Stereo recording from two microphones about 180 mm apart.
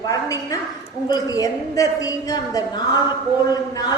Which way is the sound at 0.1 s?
20° left (ahead or behind).